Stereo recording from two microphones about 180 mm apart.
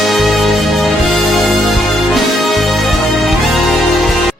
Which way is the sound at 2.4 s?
Centre (ahead or behind).